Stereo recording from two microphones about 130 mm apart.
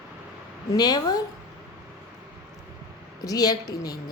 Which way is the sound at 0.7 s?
30° left (ahead or behind).